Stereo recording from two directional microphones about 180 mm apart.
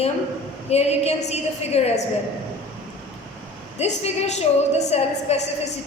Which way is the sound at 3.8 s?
35° left (ahead or behind).